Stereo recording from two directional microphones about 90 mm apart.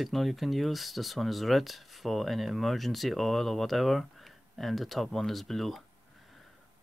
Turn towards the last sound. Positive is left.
turn(degrees=0)  # may be behind; listen again after turning